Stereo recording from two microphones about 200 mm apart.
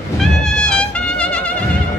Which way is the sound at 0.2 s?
5° left (ahead or behind).